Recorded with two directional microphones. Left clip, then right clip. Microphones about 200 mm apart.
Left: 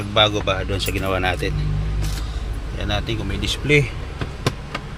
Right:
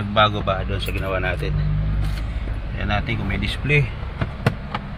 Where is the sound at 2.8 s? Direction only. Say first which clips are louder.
Even; 10° left (ahead or behind).